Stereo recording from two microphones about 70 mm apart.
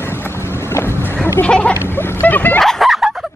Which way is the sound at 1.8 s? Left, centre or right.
Left.